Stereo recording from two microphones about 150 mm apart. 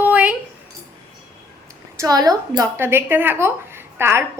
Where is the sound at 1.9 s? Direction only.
25° right (ahead or behind).